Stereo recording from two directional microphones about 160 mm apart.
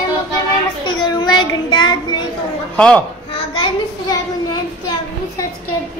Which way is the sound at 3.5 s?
30° left (ahead or behind).